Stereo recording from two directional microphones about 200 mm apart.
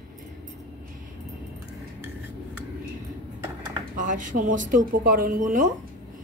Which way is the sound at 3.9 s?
40° right (ahead or behind).